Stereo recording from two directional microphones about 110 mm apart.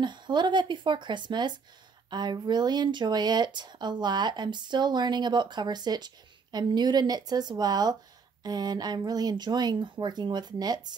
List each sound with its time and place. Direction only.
0.0 s speech: 45° right (ahead or behind)